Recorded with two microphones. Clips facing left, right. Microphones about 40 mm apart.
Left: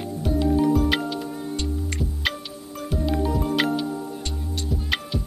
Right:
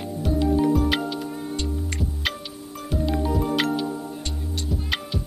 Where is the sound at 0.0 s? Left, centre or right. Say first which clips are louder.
Even; centre.